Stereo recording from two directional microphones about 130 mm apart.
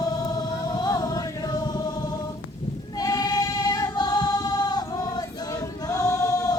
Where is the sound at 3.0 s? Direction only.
25° left (ahead or behind).